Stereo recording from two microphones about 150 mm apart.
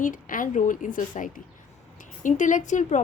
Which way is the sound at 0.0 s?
65° left (ahead or behind).